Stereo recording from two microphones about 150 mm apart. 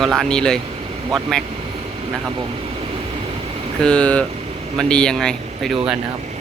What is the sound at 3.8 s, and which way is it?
Speech, 5° left (ahead or behind).